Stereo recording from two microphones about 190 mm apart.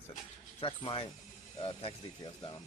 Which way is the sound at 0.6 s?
25° left (ahead or behind).